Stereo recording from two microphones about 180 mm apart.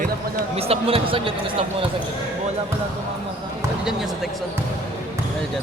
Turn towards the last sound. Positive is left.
turn(degrees=0)  # may be behind; listen again after turning